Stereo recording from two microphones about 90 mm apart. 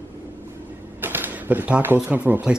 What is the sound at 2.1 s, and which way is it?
Speech, 20° right (ahead or behind).